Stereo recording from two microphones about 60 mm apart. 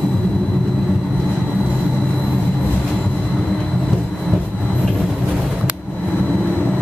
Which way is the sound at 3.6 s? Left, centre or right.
Centre.